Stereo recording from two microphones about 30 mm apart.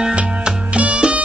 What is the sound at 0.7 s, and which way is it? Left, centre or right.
Music, right.